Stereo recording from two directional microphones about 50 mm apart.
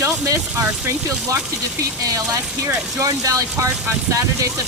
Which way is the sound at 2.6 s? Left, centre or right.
Right.